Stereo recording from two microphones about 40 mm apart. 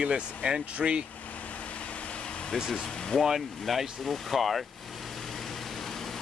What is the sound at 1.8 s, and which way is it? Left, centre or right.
Vehicle, left.